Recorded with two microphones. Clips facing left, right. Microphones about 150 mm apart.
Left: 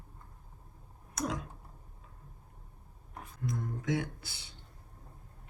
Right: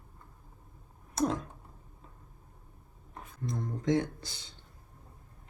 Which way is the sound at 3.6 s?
20° right (ahead or behind).